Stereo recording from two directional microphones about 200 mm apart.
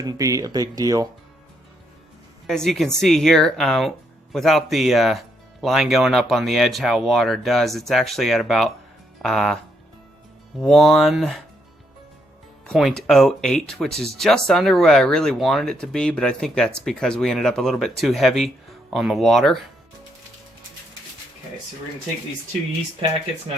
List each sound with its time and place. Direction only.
0.0 s speech: 15° right (ahead or behind)
2.5 s speech: centre (ahead or behind)
10.6 s speech: centre (ahead or behind)
12.6 s speech: centre (ahead or behind)